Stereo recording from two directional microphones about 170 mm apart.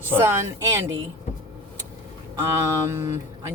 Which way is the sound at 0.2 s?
15° right (ahead or behind).